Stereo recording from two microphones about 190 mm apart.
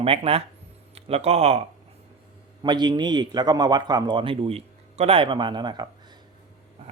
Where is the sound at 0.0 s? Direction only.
30° right (ahead or behind).